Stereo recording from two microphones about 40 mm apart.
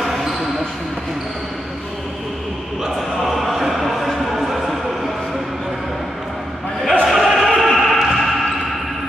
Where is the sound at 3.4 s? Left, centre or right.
Centre.